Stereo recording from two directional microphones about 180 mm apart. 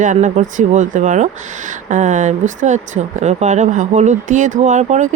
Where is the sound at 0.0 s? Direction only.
40° right (ahead or behind).